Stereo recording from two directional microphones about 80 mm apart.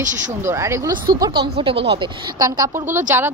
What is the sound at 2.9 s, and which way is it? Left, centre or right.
Speech, right.